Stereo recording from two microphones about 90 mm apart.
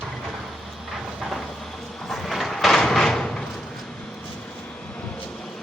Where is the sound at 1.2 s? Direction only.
Centre (ahead or behind).